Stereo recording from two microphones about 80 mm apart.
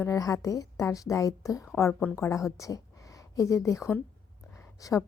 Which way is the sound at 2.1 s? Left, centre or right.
Left.